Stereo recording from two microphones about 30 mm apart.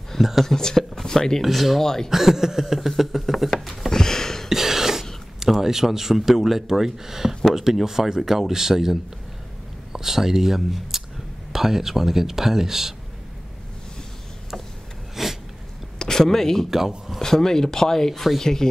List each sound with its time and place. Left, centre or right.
0.2 s speech: centre
0.6 s speech: left
1.4 s speech: centre
1.8 s speech: centre
2.0 s speech: centre
2.6 s speech: centre
3.9 s a sound: centre
4.5 s throat clearing: centre
5.6 s speech: centre
9.9 s speech: centre
15.2 s a sound: centre
16.0 s speech: centre